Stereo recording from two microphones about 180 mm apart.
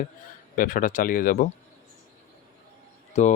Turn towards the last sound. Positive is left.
turn(degrees=40)  # may be behind; listen again after turning